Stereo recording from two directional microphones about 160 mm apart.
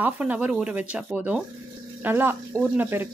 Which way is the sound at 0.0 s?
10° right (ahead or behind).